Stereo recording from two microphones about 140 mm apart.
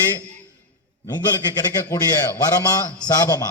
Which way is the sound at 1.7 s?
20° left (ahead or behind).